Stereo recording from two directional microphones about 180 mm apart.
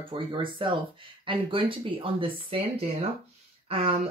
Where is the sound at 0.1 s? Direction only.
30° right (ahead or behind).